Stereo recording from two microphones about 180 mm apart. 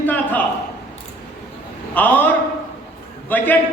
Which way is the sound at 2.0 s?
10° left (ahead or behind).